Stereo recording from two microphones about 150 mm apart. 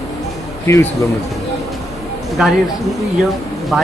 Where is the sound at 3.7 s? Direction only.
5° right (ahead or behind).